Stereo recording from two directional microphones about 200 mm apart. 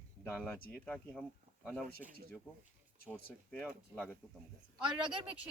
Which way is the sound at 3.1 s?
10° left (ahead or behind).